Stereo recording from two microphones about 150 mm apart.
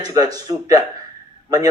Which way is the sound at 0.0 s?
25° right (ahead or behind).